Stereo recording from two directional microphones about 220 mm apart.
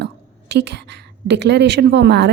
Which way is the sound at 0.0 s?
50° right (ahead or behind).